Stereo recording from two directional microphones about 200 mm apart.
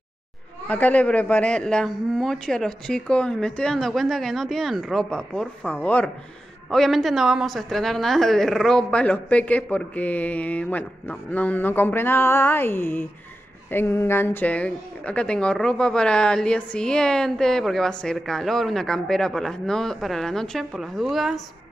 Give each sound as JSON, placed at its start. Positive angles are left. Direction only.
{"t": 0.7, "sound": "a woman's voice", "side_deg": 10}